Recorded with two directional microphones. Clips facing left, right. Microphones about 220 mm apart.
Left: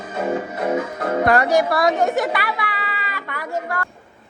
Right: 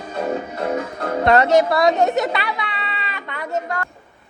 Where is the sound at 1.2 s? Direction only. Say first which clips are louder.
Right 3 dB; 25° right (ahead or behind).